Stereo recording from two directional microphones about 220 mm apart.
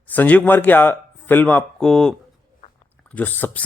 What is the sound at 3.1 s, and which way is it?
Speech, 5° left (ahead or behind).